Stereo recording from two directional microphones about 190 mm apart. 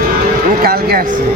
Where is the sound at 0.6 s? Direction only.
50° right (ahead or behind).